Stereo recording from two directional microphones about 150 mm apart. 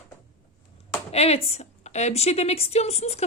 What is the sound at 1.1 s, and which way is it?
A woman's voice, 45° left (ahead or behind).